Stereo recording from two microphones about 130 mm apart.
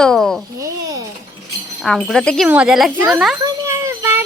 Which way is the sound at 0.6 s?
25° right (ahead or behind).